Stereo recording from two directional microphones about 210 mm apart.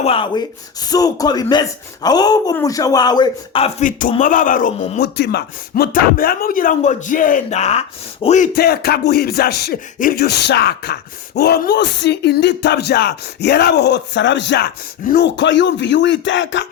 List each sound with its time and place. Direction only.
0.0 s speech: 25° left (ahead or behind)
4.9 s speech: 50° left (ahead or behind); by 8.4 s 30° left (ahead or behind)
8.5 s a sound: 45° left (ahead or behind)
11.3 s speech: 50° left (ahead or behind)